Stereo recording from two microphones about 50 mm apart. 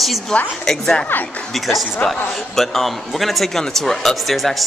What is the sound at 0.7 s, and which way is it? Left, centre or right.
Music, centre.